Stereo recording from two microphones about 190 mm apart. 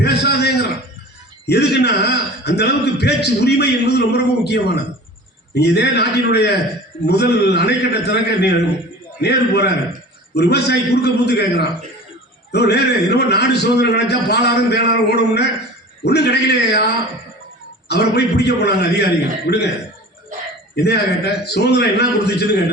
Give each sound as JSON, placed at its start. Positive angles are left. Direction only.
{"t": 0.0, "sound": "a sound", "side_deg": 60}
{"t": 1.5, "sound": "a man's voice", "side_deg": 60}
{"t": 19.5, "sound": "speech", "side_deg": 50}
{"t": 20.8, "sound": "a man's voice", "side_deg": 60}